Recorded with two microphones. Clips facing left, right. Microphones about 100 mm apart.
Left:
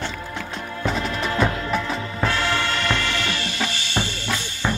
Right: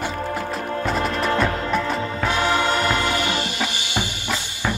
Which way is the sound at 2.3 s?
15° right (ahead or behind).